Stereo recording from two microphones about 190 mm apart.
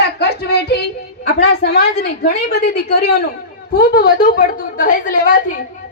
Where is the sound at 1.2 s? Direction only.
65° left (ahead or behind); by 5.6 s 45° left (ahead or behind).